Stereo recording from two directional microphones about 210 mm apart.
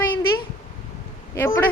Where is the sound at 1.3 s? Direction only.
15° left (ahead or behind).